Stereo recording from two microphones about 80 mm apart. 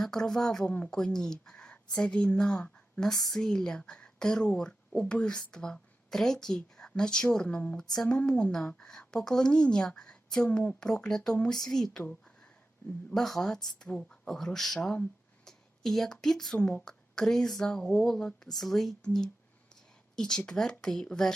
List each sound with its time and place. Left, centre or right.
0.0 s a woman's voice: centre
13.1 s a woman's voice: centre
15.4 s a sound: centre
16.2 s a woman's voice: centre